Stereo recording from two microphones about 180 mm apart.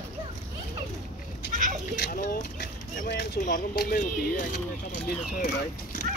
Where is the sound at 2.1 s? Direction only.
50° left (ahead or behind).